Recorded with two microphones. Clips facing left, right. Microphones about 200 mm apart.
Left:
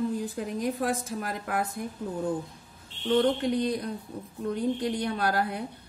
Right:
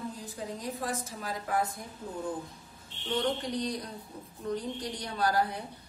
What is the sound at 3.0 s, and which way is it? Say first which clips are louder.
A woman's voice: left 7 dB; 60° left (ahead or behind).